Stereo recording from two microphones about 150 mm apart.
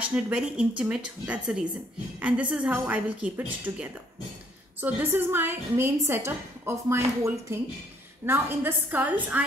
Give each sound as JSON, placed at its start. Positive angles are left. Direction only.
{"t": 0.1, "sound": "a woman's voice", "side_deg": -5}